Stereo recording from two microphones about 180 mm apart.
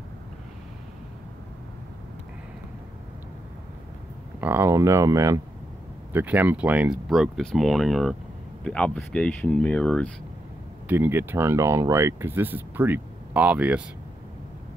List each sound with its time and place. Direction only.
4.4 s speech: 10° right (ahead or behind); by 10.1 s 5° left (ahead or behind)
10.9 s speech: 10° right (ahead or behind)